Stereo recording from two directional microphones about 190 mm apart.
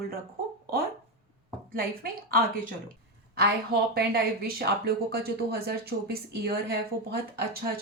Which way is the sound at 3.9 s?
55° right (ahead or behind).